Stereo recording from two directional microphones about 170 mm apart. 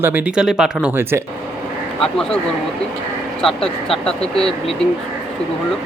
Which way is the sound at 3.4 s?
5° left (ahead or behind).